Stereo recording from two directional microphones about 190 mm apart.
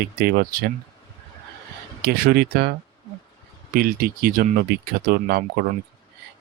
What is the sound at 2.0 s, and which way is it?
Speech, 55° right (ahead or behind).